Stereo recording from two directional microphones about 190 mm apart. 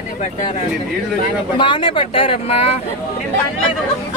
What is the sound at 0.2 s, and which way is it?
Speech, 40° left (ahead or behind).